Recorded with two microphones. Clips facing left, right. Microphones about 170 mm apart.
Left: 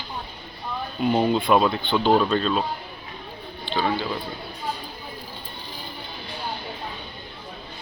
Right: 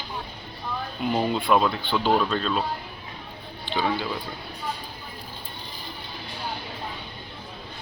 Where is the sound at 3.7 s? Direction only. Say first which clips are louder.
Left 1 dB; 15° right (ahead or behind).